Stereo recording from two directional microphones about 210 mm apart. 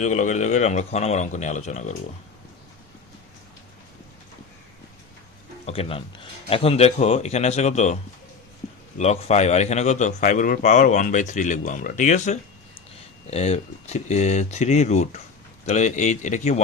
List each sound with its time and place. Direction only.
0.0 s a man's voice: 35° left (ahead or behind)
5.6 s a man's voice: 25° left (ahead or behind)
9.0 s a man's voice: 30° left (ahead or behind)